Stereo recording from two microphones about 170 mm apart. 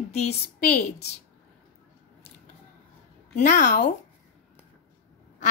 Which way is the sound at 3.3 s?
45° left (ahead or behind).